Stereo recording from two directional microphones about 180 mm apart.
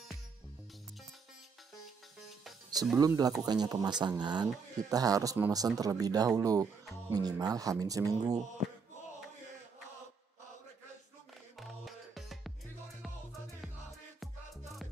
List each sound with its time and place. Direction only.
3.0 s speech: 20° right (ahead or behind)
11.6 s music: centre (ahead or behind)
14.2 s music: centre (ahead or behind)